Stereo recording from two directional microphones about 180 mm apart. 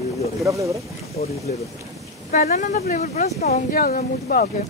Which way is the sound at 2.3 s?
40° left (ahead or behind).